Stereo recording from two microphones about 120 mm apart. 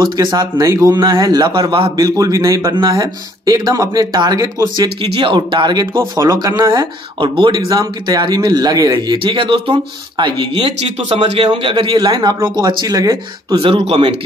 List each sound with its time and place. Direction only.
0.0 s speech: 40° right (ahead or behind)
0.7 s speech: 30° right (ahead or behind); by 1.9 s 45° right (ahead or behind)
2.0 s speech: 30° right (ahead or behind)
2.7 s speech: 40° right (ahead or behind)
4.7 s speech: 45° right (ahead or behind)
5.9 s speech: 25° right (ahead or behind); by 7.6 s 45° right (ahead or behind)
7.6 s speech: 30° right (ahead or behind)
13.6 s speech: 50° right (ahead or behind)